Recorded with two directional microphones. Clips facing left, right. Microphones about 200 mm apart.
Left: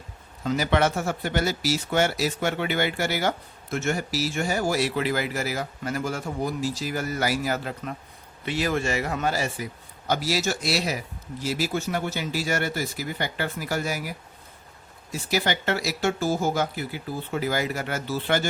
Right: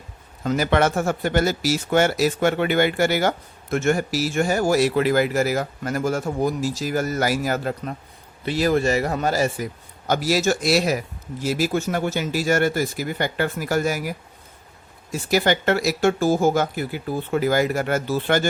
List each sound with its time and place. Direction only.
0.4 s speech: 50° right (ahead or behind)
15.1 s speech: 50° right (ahead or behind)